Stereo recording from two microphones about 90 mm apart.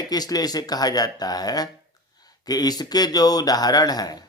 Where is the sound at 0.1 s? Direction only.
45° left (ahead or behind).